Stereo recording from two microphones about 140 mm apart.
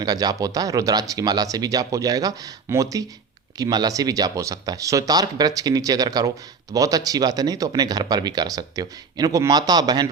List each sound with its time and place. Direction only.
0.0 s speech: 30° right (ahead or behind)